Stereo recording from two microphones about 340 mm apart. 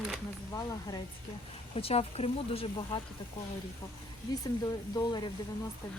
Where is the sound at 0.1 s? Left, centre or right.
Centre.